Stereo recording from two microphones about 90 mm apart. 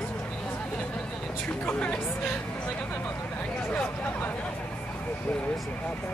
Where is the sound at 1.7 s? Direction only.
15° left (ahead or behind).